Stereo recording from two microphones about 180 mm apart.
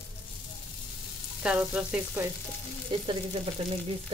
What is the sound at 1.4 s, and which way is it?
Speech, 5° right (ahead or behind).